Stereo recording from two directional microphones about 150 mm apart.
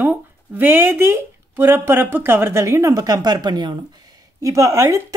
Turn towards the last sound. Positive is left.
turn(degrees=-20)  # may be behind; listen again after turning